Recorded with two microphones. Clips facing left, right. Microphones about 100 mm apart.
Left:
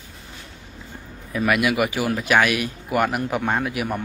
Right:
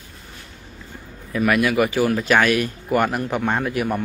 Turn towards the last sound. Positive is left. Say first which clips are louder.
# right 2 dB
turn(degrees=5)  # may be behind; listen again after turning